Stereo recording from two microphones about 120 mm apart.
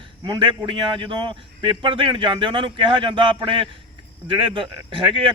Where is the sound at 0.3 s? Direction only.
40° right (ahead or behind).